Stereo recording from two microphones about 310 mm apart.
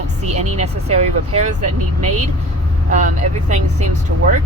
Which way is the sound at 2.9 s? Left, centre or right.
Right.